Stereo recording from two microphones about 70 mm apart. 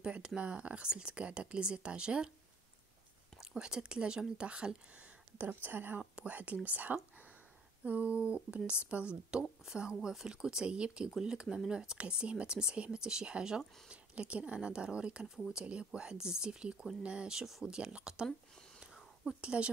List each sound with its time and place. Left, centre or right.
0.0 s speech: centre
3.3 s speech: centre
5.4 s speech: right